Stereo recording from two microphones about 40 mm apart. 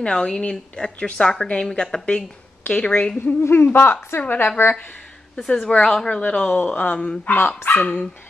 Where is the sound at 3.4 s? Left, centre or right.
Left.